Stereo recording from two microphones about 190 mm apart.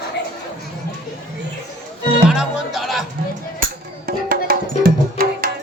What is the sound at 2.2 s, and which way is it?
Music, centre (ahead or behind).